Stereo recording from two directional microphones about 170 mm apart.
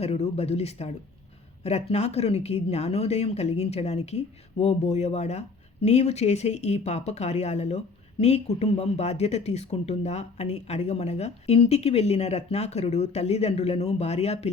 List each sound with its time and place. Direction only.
0.0 s speech: 40° left (ahead or behind)